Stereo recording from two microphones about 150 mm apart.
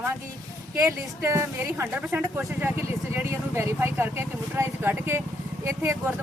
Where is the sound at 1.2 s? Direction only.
15° right (ahead or behind).